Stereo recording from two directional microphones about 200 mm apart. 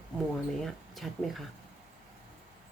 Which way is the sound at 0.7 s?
Centre (ahead or behind).